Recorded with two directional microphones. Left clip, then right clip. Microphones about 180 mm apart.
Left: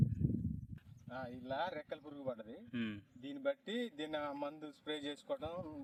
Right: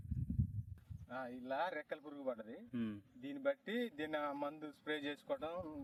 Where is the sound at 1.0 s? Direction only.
10° left (ahead or behind).